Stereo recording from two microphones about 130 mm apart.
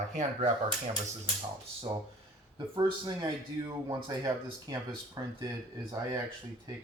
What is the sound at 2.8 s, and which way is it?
Speech, 35° right (ahead or behind).